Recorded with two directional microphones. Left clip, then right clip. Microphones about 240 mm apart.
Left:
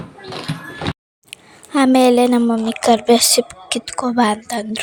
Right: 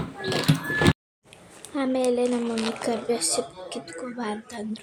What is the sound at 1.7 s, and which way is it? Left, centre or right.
A woman's voice, left.